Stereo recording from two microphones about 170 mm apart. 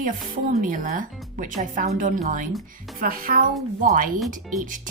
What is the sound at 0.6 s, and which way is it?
Speech, 50° right (ahead or behind).